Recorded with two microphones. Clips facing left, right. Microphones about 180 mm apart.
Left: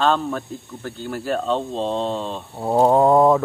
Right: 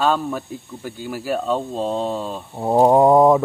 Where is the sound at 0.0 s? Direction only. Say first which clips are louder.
Even; 10° right (ahead or behind).